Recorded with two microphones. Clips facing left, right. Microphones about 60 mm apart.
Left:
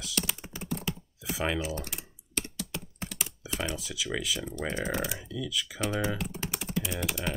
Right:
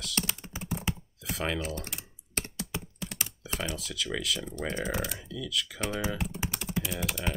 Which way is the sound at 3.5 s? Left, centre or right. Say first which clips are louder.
Even; centre.